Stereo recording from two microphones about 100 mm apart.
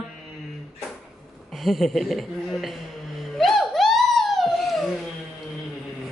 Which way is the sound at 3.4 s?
Centre (ahead or behind).